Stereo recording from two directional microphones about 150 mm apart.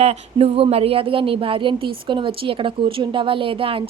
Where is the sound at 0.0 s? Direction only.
45° right (ahead or behind).